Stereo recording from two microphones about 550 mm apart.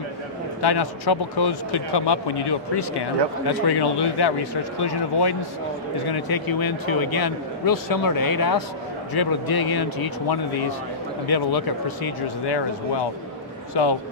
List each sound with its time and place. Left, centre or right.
0.6 s speech: left